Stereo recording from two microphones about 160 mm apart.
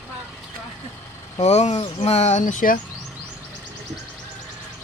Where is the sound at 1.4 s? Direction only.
45° left (ahead or behind).